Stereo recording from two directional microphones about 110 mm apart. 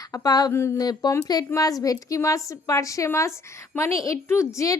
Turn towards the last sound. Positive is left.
turn(degrees=25)  # may be behind; listen again after turning